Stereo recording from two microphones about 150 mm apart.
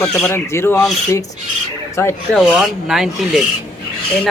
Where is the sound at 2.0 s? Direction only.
15° left (ahead or behind).